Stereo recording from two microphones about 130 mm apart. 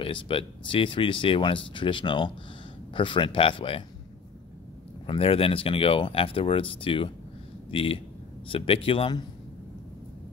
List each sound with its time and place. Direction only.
0.0 s speech: 45° left (ahead or behind)
5.0 s speech: 45° left (ahead or behind)